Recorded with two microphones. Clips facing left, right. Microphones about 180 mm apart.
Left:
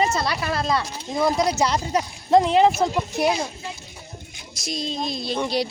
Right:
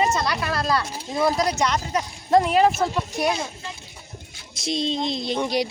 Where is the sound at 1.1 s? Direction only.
Centre (ahead or behind).